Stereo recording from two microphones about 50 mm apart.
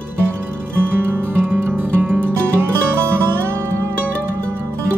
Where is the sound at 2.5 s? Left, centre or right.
Right.